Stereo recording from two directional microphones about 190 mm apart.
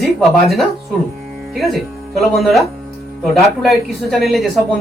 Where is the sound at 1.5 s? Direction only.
Centre (ahead or behind).